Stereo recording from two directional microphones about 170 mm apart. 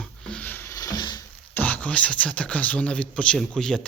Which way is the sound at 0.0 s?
5° left (ahead or behind).